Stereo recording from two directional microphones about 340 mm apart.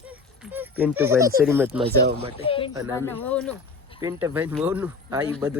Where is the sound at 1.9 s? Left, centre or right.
Right.